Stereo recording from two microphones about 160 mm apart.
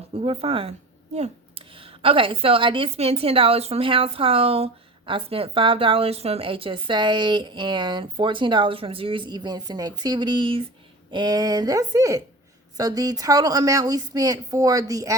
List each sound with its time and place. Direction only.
0.1 s a woman's voice: 35° right (ahead or behind); by 15.1 s 20° right (ahead or behind)